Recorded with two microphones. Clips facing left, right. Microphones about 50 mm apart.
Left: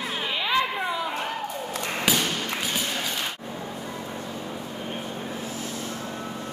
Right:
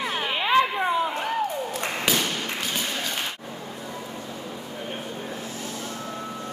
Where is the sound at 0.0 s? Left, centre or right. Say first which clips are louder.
Right 2 dB; right.